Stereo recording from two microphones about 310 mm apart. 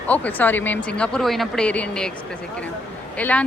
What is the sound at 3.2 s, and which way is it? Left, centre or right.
Speech, centre.